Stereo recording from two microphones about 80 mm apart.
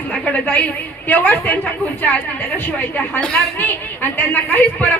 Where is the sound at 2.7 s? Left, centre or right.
Left.